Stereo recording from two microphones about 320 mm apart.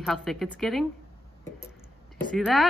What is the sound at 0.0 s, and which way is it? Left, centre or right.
Speech, centre.